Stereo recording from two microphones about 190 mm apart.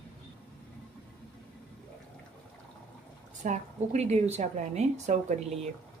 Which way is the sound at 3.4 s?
40° right (ahead or behind).